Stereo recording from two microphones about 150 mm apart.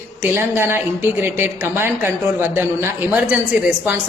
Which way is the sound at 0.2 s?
15° right (ahead or behind).